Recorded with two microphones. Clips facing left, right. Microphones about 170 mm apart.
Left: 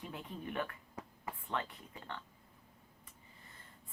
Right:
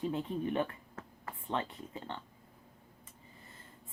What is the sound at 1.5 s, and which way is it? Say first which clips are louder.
Speech: right 5 dB; 25° right (ahead or behind).